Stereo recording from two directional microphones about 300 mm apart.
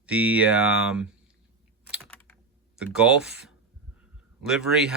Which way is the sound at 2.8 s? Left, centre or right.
Centre.